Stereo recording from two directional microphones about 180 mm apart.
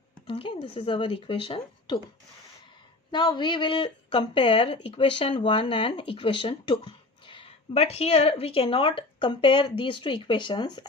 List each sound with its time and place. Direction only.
0.3 s speech: 30° left (ahead or behind)
3.1 s speech: 25° left (ahead or behind)